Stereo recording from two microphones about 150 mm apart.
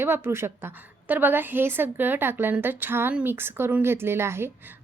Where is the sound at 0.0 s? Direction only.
15° right (ahead or behind).